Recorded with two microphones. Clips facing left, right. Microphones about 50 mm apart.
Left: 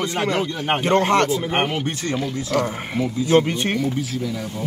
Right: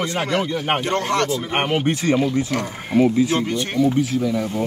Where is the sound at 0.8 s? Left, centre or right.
Left.